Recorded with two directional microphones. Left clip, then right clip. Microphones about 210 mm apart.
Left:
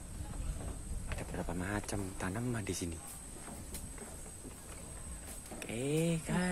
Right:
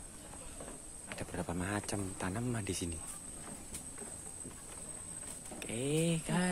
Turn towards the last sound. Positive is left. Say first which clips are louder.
# right 1 dB
turn(degrees=-5)  # may be behind; listen again after turning